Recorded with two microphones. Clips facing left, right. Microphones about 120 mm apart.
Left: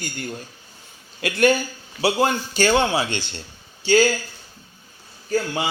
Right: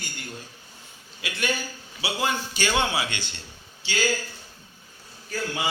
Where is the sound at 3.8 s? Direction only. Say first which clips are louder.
Left 15 dB; 40° left (ahead or behind).